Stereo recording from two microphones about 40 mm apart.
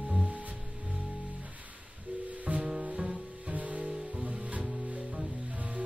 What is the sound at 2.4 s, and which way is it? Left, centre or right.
Music, right.